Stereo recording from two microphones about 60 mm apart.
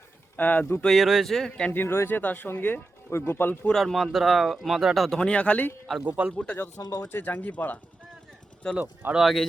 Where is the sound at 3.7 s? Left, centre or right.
Centre.